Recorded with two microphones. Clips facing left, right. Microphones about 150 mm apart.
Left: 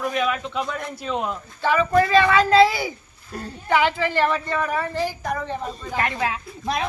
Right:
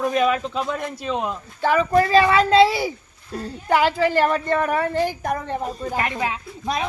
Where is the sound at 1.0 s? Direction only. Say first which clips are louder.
Even; 20° right (ahead or behind).